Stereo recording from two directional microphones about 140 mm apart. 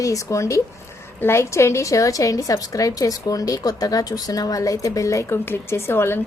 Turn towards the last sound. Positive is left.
turn(degrees=15)  # may be behind; listen again after turning